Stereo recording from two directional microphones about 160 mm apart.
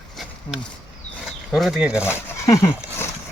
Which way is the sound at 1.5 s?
Centre (ahead or behind).